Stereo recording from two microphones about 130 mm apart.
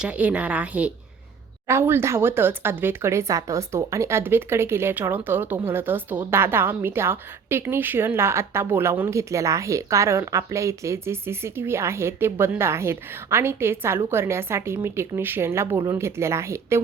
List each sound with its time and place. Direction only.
0.0 s a woman's voice: 10° right (ahead or behind)